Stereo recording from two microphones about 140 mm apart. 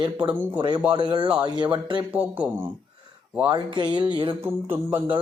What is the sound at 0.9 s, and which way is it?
Speech, 35° right (ahead or behind).